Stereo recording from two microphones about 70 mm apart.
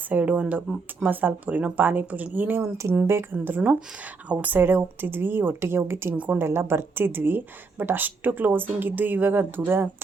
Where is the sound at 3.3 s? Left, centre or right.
Right.